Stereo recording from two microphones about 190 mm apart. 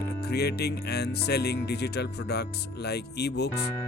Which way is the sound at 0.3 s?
60° left (ahead or behind).